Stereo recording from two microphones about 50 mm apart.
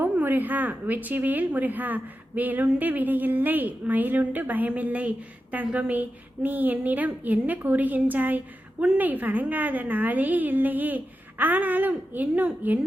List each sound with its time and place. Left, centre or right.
0.0 s a woman's voice: right